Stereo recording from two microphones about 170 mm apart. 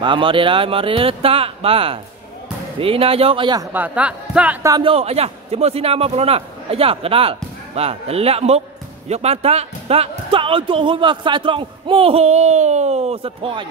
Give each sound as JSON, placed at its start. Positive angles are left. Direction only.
{"t": 0.0, "sound": "speech", "side_deg": -30}
{"t": 3.7, "sound": "speech", "side_deg": -10}
{"t": 4.6, "sound": "speech", "side_deg": -25}
{"t": 4.9, "sound": "speech", "side_deg": -35}